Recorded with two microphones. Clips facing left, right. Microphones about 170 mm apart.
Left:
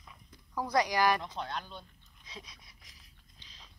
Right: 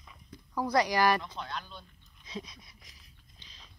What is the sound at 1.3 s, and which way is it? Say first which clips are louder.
Speech: left 1 dB; 45° left (ahead or behind).